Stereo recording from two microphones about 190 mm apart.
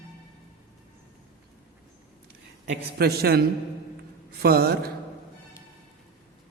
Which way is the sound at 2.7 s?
55° right (ahead or behind).